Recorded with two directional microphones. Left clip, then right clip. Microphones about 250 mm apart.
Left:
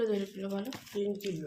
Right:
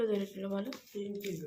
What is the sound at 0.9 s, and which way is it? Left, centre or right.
Speech, left.